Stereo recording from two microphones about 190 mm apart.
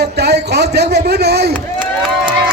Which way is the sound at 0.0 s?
60° right (ahead or behind).